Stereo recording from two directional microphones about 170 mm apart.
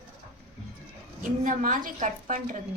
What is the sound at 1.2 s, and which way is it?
A woman's voice, 50° right (ahead or behind).